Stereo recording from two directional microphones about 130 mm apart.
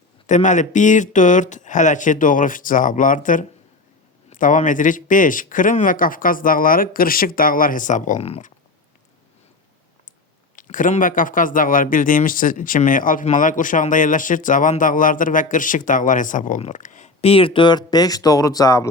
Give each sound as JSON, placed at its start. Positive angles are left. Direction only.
{"t": 0.3, "sound": "speech", "side_deg": 70}
{"t": 10.5, "sound": "speech", "side_deg": 90}
{"t": 16.6, "sound": "speech", "side_deg": 70}